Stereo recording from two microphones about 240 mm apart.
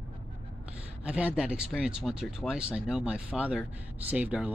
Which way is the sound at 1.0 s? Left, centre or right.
Centre.